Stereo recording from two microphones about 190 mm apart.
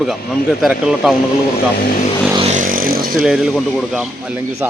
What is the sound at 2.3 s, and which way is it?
Vehicle, 35° right (ahead or behind).